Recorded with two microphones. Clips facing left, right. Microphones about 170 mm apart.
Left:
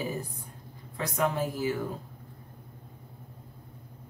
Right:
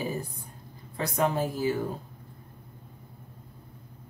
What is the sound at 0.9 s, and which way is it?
Speech, 30° right (ahead or behind).